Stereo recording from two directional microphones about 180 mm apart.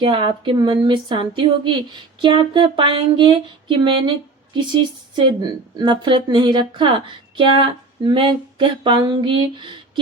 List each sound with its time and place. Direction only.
0.0 s speech: 25° right (ahead or behind)